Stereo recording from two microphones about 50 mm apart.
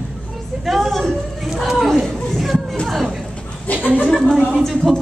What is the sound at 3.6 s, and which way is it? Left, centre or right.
Speech, left.